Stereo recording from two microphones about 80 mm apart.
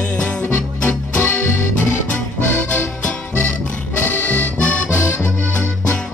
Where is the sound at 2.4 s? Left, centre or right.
Left.